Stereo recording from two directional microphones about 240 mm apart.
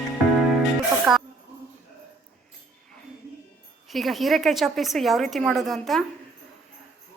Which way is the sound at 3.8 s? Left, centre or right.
Centre.